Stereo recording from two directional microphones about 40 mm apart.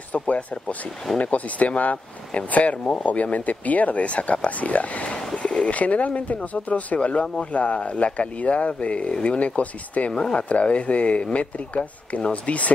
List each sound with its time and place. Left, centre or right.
0.1 s speech: left
3.1 s speech: left
10.1 s speech: left